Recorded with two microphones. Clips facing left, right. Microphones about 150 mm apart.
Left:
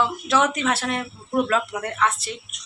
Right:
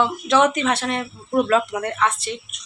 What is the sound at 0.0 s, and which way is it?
Speech, 5° left (ahead or behind).